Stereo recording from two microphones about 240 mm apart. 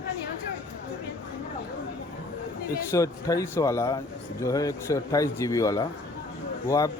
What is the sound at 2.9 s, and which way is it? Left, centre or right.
A man's voice, centre.